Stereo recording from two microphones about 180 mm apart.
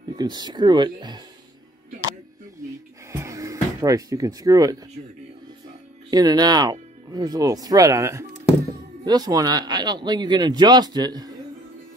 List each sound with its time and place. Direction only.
0.1 s speech: 25° right (ahead or behind)
3.1 s music: 15° right (ahead or behind)
6.0 s speech: 20° right (ahead or behind)